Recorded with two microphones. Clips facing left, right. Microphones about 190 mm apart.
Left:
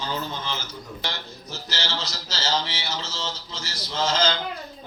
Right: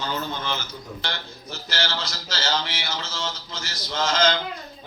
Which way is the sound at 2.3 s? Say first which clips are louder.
Even; 30° left (ahead or behind).